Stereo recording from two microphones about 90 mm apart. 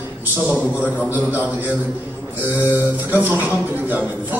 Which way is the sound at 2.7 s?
20° right (ahead or behind).